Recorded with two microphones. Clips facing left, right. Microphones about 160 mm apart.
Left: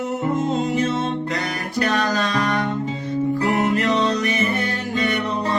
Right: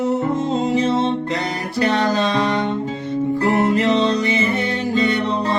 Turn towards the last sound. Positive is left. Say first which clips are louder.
# right 4 dB
turn(degrees=-25)  # may be behind; listen again after turning